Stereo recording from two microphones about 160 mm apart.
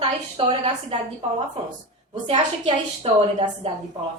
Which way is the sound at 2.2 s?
40° right (ahead or behind).